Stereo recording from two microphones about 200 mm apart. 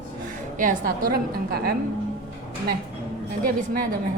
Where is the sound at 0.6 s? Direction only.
45° right (ahead or behind).